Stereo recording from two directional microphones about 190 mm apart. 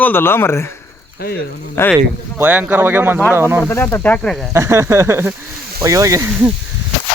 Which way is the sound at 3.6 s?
10° left (ahead or behind).